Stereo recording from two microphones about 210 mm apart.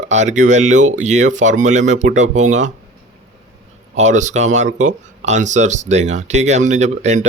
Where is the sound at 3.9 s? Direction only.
35° right (ahead or behind).